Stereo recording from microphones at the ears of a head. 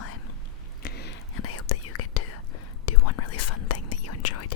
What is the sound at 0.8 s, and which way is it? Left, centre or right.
Whispering, left.